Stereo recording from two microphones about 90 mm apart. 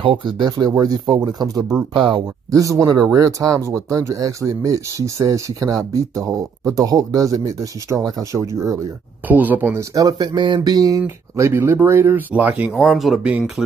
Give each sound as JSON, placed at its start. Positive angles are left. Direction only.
{"t": 0.0, "sound": "speech", "side_deg": -90}
{"t": 0.5, "sound": "speech", "side_deg": -45}
{"t": 2.0, "sound": "speech", "side_deg": -65}
{"t": 2.5, "sound": "speech", "side_deg": -40}
{"t": 9.3, "sound": "speech", "side_deg": -20}
{"t": 9.9, "sound": "speech", "side_deg": -45}
{"t": 11.0, "sound": "speech", "side_deg": -30}
{"t": 12.9, "sound": "speech", "side_deg": -5}